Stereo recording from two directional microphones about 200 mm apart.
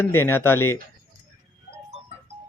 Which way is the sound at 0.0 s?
10° left (ahead or behind).